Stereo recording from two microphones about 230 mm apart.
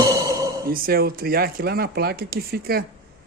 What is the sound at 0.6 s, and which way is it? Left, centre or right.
Speech, right.